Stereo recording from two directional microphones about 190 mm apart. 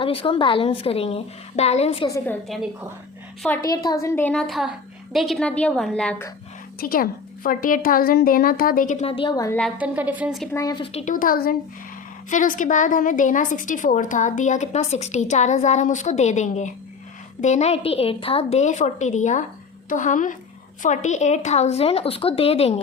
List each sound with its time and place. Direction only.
0.0 s a woman's voice: 30° left (ahead or behind)
2.0 s a woman's voice: 15° left (ahead or behind)
3.6 s a woman's voice: 20° left (ahead or behind)
6.7 s a woman's voice: 50° left (ahead or behind); by 9.6 s 20° left (ahead or behind)
9.7 s a woman's voice: 10° right (ahead or behind)
10.5 s speech: 20° left (ahead or behind)
10.9 s a woman's voice: 45° left (ahead or behind)